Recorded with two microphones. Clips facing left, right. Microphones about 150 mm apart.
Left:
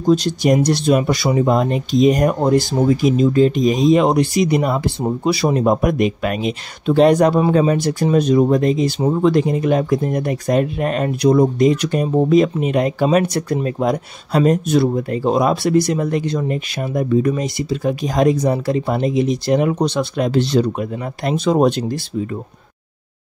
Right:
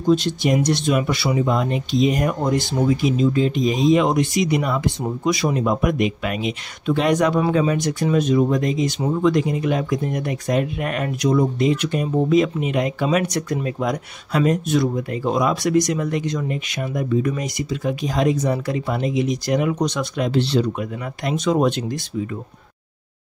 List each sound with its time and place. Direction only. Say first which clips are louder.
0.0 s speech: left 3 dB; 40° left (ahead or behind)
18.0 s speech: left 4 dB; 45° left (ahead or behind)
20.2 s speech: left 2 dB; 45° left (ahead or behind)